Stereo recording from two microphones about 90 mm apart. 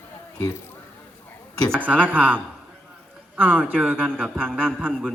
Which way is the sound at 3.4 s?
20° right (ahead or behind).